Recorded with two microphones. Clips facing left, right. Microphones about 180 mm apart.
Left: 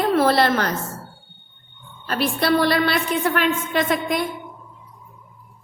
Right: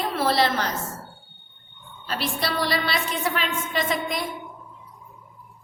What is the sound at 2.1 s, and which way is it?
A woman's voice, 55° left (ahead or behind).